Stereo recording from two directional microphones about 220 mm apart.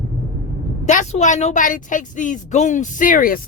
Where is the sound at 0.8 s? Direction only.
30° left (ahead or behind).